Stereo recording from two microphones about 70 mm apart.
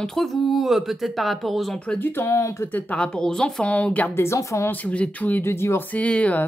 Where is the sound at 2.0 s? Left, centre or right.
Left.